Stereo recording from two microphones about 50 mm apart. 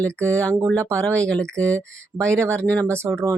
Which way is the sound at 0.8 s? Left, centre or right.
Right.